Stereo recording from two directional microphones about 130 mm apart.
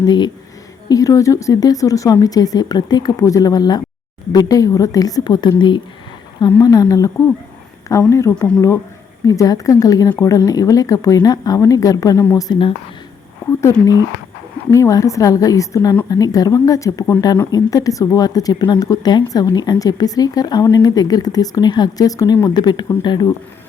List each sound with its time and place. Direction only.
0.0 s a woman's voice: 35° left (ahead or behind)
13.5 s a woman's voice: 20° left (ahead or behind)